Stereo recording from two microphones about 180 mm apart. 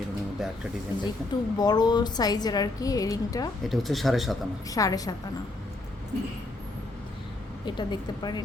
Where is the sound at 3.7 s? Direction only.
Centre (ahead or behind).